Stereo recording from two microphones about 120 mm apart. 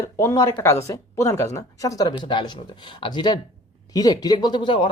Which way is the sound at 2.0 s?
40° left (ahead or behind).